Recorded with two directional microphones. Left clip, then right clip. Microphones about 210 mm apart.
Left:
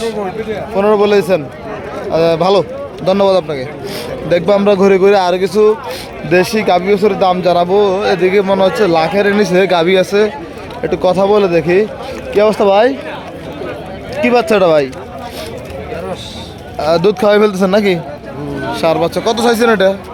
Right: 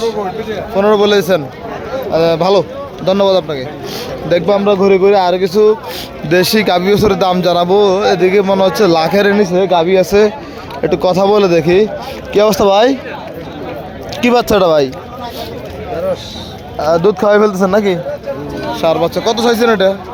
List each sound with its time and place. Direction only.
0.8 s a man's voice: 5° right (ahead or behind); by 5.1 s 15° left (ahead or behind)
5.1 s a man's voice: centre (ahead or behind)
6.2 s a man's voice: 15° right (ahead or behind)
9.5 s a man's voice: 10° left (ahead or behind)
10.0 s a man's voice: 10° right (ahead or behind)
14.2 s a man's voice: 15° right (ahead or behind)
16.7 s a man's voice: 10° left (ahead or behind)